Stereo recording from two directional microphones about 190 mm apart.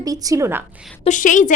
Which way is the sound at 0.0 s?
20° right (ahead or behind).